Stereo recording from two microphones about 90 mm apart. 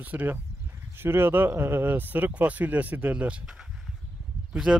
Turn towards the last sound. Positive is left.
turn(degrees=-5)  # may be behind; listen again after turning